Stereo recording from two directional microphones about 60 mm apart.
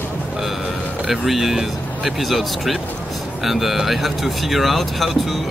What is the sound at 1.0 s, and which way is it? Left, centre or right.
Speech, centre.